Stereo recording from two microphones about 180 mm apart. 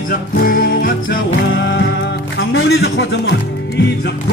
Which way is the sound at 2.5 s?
85° left.